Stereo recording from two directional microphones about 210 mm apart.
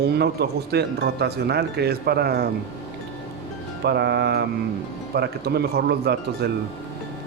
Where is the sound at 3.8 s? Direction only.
50° right (ahead or behind).